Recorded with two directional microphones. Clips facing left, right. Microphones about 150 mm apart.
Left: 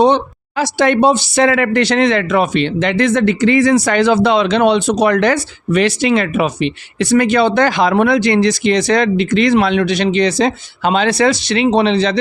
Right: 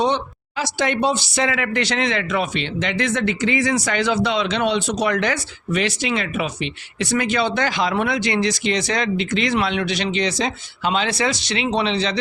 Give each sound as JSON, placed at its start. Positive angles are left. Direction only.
{"t": 0.0, "sound": "speech", "side_deg": 60}